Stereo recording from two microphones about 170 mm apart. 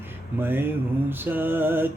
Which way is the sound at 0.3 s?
10° right (ahead or behind).